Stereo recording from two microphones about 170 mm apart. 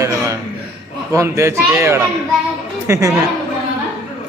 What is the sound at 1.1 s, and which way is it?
A woman's voice, 15° right (ahead or behind).